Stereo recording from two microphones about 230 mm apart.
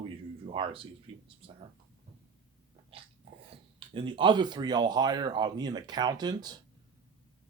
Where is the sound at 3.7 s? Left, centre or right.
Right.